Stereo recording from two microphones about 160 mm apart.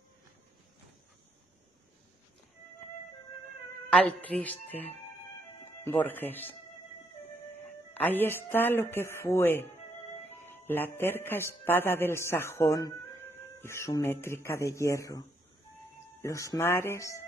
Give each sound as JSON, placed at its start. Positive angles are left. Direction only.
{"t": 4.3, "sound": "speech", "side_deg": 10}
{"t": 8.0, "sound": "a man's voice", "side_deg": 10}